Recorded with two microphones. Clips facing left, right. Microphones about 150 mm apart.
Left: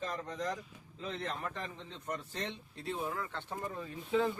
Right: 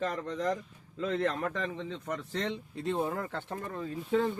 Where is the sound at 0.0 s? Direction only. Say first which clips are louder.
Right 6 dB; 75° right (ahead or behind).